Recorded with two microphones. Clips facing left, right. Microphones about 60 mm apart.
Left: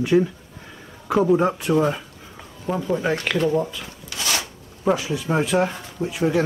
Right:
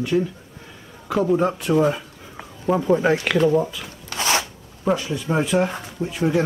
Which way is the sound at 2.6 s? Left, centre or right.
Centre.